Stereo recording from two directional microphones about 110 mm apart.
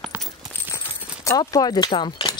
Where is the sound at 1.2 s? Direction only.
30° left (ahead or behind).